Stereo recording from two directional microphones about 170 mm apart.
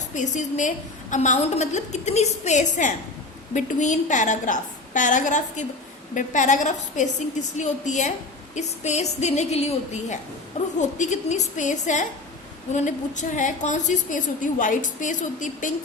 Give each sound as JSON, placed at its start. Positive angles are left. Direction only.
{"t": 0.1, "sound": "a woman's voice", "side_deg": 45}